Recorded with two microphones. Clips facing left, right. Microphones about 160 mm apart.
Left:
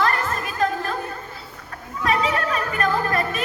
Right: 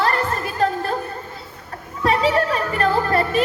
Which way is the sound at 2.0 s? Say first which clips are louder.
Right 4 dB; 30° right (ahead or behind).